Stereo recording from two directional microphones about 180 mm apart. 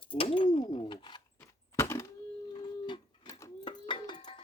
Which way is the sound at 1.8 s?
15° left (ahead or behind).